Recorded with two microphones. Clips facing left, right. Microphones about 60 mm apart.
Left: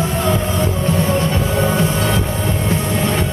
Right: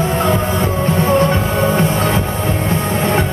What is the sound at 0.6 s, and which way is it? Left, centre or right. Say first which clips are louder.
Music: right 2 dB; right.